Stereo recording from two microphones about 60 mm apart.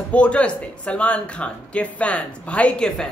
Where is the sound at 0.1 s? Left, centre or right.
Left.